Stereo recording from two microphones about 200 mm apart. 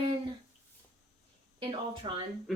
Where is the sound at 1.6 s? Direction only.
25° right (ahead or behind).